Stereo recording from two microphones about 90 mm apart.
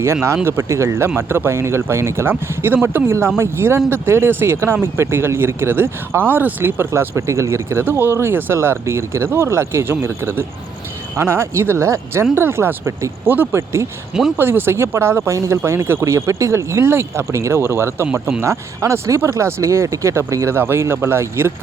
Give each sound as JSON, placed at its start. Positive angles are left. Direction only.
{"t": 0.0, "sound": "speech", "side_deg": -30}
{"t": 14.1, "sound": "speech", "side_deg": -5}
{"t": 14.3, "sound": "speech", "side_deg": -25}
{"t": 18.4, "sound": "speech", "side_deg": -35}